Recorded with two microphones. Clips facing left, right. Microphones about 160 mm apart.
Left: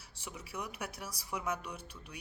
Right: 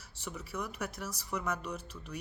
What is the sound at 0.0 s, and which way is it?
A woman's voice, 10° left (ahead or behind).